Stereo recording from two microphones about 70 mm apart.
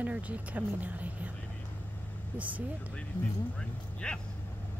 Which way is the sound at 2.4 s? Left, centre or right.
Right.